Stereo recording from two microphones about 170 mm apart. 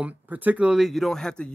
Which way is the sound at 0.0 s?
10° right (ahead or behind).